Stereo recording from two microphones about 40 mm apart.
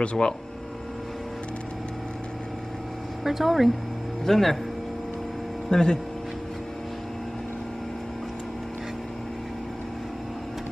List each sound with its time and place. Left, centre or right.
0.0 s speech: left
3.3 s speech: centre
5.7 s speech: centre